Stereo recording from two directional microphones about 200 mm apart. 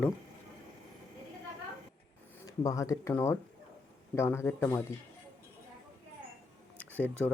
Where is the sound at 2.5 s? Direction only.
15° left (ahead or behind).